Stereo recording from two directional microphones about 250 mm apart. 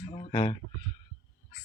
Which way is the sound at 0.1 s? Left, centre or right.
Left.